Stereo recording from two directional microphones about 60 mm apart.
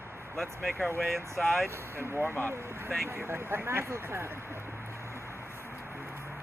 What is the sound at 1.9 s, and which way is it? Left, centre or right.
Speech, right.